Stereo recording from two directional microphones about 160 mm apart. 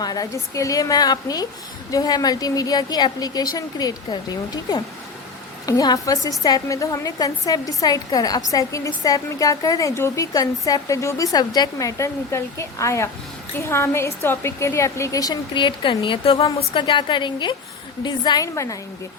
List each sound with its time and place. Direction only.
0.0 s a woman's voice: 25° left (ahead or behind)